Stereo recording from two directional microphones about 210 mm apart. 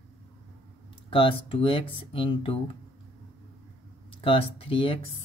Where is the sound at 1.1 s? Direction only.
25° left (ahead or behind).